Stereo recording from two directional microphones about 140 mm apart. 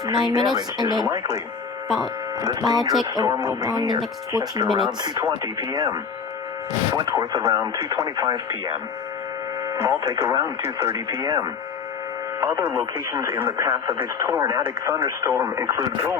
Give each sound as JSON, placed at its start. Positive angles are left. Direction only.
{"t": 0.0, "sound": "speech", "side_deg": -30}
{"t": 2.4, "sound": "speech", "side_deg": -25}
{"t": 9.7, "sound": "speech", "side_deg": -20}
{"t": 12.8, "sound": "speech", "side_deg": -20}
{"t": 14.4, "sound": "speech", "side_deg": -35}